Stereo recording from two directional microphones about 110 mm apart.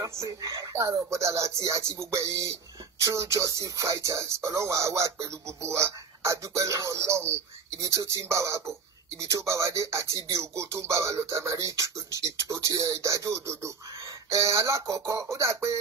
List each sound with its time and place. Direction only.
0.0 s speech: 30° right (ahead or behind)